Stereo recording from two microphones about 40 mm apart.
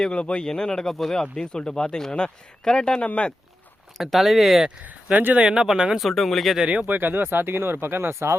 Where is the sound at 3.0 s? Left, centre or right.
Left.